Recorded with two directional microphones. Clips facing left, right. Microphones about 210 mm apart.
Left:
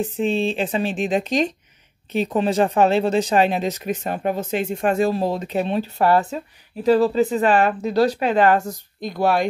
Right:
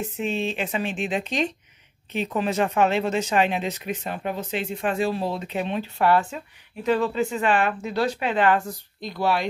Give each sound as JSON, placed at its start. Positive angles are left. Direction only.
{"t": 0.0, "sound": "speech", "side_deg": 30}